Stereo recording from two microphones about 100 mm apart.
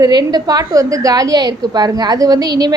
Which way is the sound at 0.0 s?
45° right (ahead or behind).